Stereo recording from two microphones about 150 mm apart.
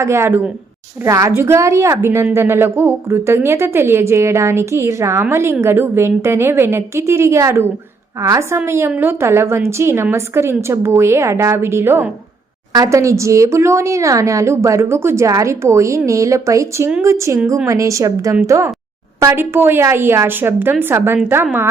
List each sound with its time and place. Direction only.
0.0 s a woman's voice: 15° right (ahead or behind)